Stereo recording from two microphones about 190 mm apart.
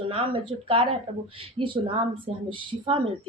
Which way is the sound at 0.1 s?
30° right (ahead or behind).